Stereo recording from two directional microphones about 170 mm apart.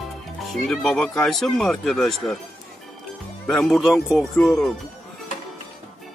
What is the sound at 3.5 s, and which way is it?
Speech, centre (ahead or behind).